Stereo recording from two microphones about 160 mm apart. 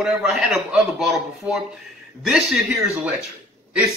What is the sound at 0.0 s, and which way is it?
A man's voice, 5° right (ahead or behind).